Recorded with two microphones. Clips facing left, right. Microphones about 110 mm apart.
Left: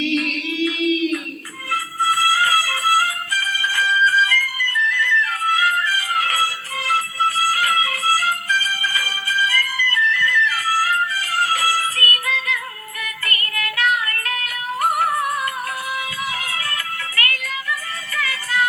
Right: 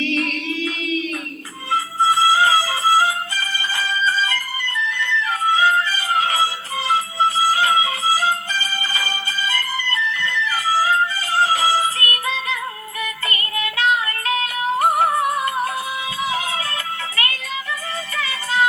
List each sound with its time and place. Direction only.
0.9 s a sound: 15° left (ahead or behind)
1.7 s music: 25° right (ahead or behind)
17.2 s music: 25° right (ahead or behind)